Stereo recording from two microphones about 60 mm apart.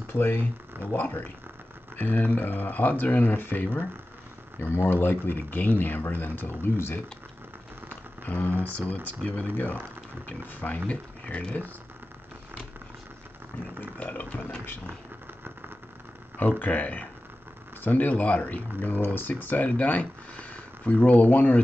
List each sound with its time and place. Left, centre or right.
0.1 s speech: left
8.3 s speech: left
10.9 s speech: left
13.7 s speech: left
16.3 s speech: left